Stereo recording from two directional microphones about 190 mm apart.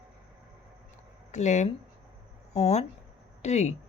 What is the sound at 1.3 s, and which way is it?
Speech, 35° left (ahead or behind).